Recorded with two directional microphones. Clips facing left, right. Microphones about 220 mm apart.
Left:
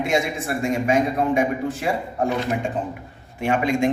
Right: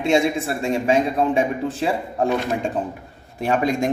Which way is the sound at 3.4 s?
35° right (ahead or behind).